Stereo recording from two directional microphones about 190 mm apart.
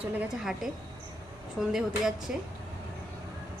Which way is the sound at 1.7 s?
Centre (ahead or behind).